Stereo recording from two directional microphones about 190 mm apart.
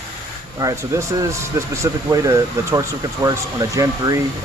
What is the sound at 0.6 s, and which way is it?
Speech, 15° right (ahead or behind).